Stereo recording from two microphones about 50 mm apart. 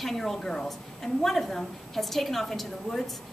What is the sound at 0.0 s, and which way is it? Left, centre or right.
A woman's voice, centre.